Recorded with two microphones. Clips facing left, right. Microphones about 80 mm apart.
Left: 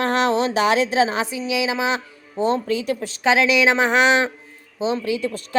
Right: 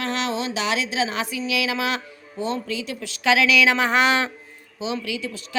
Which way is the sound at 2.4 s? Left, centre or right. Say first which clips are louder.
Left 6 dB; left.